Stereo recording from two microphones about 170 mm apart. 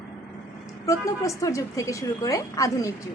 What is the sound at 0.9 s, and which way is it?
A woman's voice, 20° left (ahead or behind).